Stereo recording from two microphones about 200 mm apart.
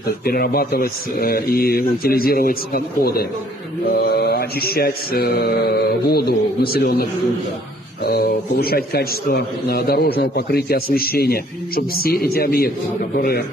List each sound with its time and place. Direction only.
0.2 s a man's voice: 50° left (ahead or behind)